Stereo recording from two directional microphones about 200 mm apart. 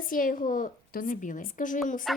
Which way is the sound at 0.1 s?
45° left (ahead or behind).